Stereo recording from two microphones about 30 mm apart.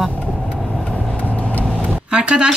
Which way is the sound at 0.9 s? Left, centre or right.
Left.